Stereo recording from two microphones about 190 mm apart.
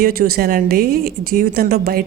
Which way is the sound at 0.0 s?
50° right (ahead or behind).